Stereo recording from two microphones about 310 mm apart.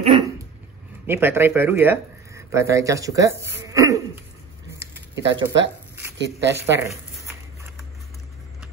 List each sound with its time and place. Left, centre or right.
1.0 s speech: centre
3.6 s cough: centre
5.1 s speech: right
6.6 s a sound: centre